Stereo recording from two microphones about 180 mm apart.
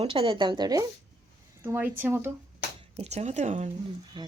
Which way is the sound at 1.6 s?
10° right (ahead or behind).